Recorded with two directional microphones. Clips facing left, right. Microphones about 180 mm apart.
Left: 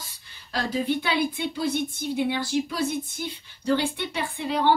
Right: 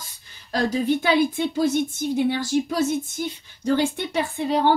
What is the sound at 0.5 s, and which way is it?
Speech, 45° right (ahead or behind).